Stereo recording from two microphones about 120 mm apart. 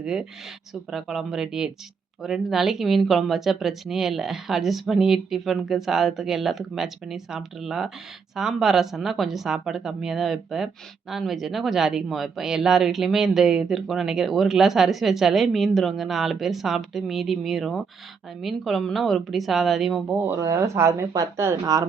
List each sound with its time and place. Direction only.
0.0 s speech: 5° right (ahead or behind)
20.2 s speech: 25° right (ahead or behind)